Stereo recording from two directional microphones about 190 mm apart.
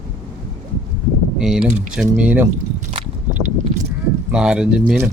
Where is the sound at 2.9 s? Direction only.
40° right (ahead or behind).